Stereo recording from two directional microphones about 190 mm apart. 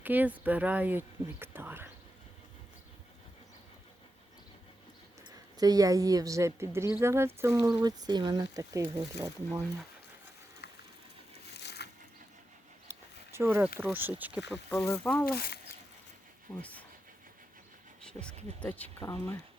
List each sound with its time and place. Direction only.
0.0 s speech: 10° right (ahead or behind)
5.5 s speech: 20° right (ahead or behind)
11.5 s a sound: 60° left (ahead or behind)
12.9 s a sound: 15° right (ahead or behind)
13.7 s speech: 10° right (ahead or behind)
14.5 s speech: 15° left (ahead or behind)
15.3 s speech: 50° left (ahead or behind)
16.6 s speech: 10° left (ahead or behind)
18.2 s speech: 5° left (ahead or behind)